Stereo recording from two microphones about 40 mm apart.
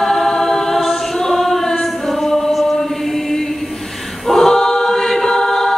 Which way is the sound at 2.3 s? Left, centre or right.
Centre.